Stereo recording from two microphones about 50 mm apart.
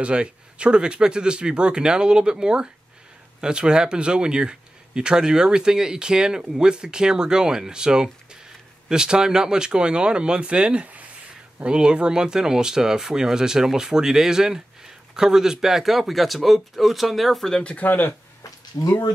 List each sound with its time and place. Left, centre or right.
0.0 s speech: right; by 17.5 s centre
17.8 s speech: left
18.8 s speech: left